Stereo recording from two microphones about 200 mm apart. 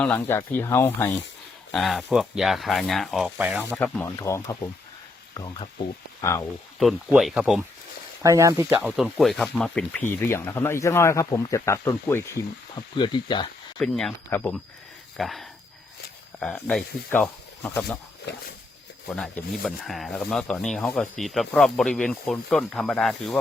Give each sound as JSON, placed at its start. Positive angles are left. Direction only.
{"t": 0.0, "sound": "speech", "side_deg": 10}
{"t": 1.7, "sound": "speech", "side_deg": 0}
{"t": 3.7, "sound": "speech", "side_deg": 5}
{"t": 6.7, "sound": "speech", "side_deg": 0}
{"t": 8.2, "sound": "speech", "side_deg": -15}
{"t": 13.7, "sound": "speech", "side_deg": 5}
{"t": 18.3, "sound": "speech", "side_deg": 60}
{"t": 19.0, "sound": "speech", "side_deg": 5}